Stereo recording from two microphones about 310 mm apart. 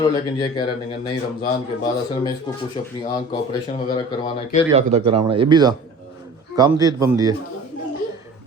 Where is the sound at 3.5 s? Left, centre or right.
Centre.